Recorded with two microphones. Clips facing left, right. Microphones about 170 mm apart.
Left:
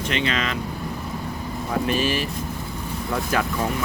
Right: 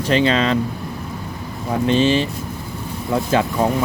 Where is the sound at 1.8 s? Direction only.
25° right (ahead or behind).